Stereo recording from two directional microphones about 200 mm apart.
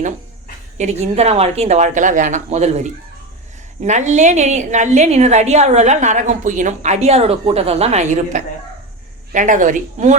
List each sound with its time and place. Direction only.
0.8 s a woman's voice: 35° right (ahead or behind)